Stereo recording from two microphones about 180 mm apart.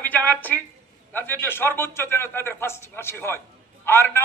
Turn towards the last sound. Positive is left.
turn(degrees=15)  # may be behind; listen again after turning